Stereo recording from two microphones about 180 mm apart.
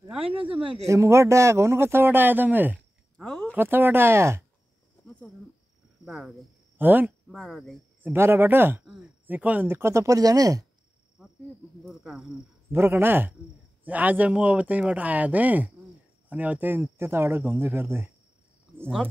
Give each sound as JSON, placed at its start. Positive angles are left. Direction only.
{"t": 0.1, "sound": "speech", "side_deg": -10}
{"t": 0.6, "sound": "speech", "side_deg": -30}
{"t": 0.8, "sound": "speech", "side_deg": -15}
{"t": 3.3, "sound": "a sound", "side_deg": 5}
{"t": 3.5, "sound": "speech", "side_deg": -10}
{"t": 6.0, "sound": "speech", "side_deg": 0}
{"t": 7.2, "sound": "speech", "side_deg": 0}
{"t": 8.0, "sound": "speech", "side_deg": -10}
{"t": 11.8, "sound": "speech", "side_deg": 0}